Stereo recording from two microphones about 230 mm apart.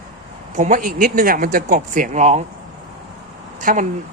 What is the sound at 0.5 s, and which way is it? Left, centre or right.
A man's voice, right.